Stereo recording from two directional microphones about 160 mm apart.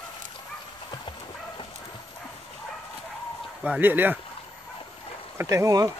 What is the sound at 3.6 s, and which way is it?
Speech, 10° right (ahead or behind).